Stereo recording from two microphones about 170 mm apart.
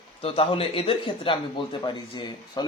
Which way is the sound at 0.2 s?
30° left (ahead or behind).